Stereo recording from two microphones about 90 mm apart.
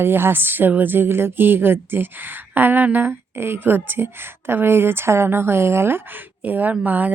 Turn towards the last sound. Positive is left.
turn(degrees=-20)  # may be behind; listen again after turning